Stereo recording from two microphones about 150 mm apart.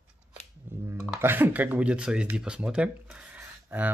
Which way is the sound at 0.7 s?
15° right (ahead or behind).